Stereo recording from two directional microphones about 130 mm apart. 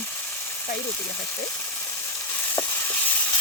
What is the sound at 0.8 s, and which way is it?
Frying, 15° left (ahead or behind).